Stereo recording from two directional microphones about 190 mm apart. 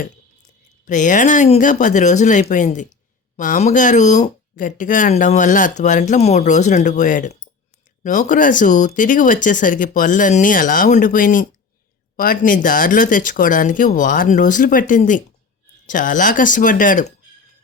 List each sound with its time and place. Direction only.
0.9 s speech: 40° left (ahead or behind)